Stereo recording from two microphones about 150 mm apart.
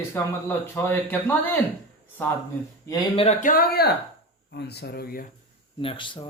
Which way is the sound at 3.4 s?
65° left (ahead or behind).